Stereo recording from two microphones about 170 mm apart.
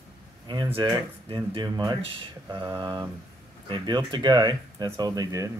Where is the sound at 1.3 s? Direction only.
25° right (ahead or behind).